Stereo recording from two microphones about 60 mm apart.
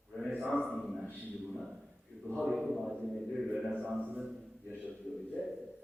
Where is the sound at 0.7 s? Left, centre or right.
Centre.